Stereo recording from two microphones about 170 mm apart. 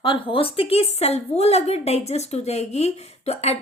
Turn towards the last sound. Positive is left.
turn(degrees=40)  # may be behind; listen again after turning